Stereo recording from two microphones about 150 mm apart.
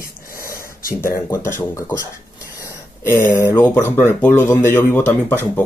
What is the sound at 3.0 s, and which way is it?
Speech, 15° left (ahead or behind).